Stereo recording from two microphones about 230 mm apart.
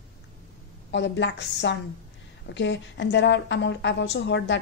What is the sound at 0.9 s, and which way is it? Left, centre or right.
A woman's voice, left.